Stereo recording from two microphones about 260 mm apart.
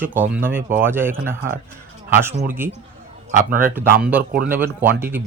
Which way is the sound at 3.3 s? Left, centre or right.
Right.